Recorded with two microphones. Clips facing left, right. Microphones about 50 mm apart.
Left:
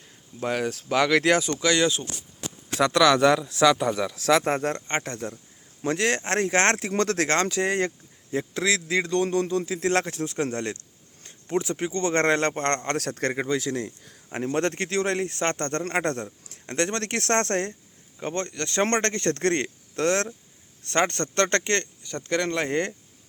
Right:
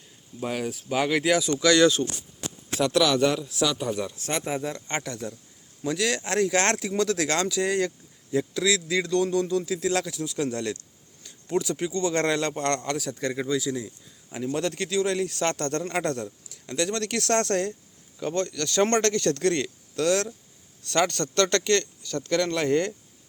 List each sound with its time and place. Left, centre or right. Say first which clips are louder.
0.3 s speech: left 3 dB; left
1.5 s speech: right 3 dB; left
2.7 s a man's voice: left 3 dB; left
4.9 s speech: left 2 dB; left
13.0 s speech: left 2 dB; left
13.4 s speech: left 1 dB; left
14.3 s speech: left 2 dB; left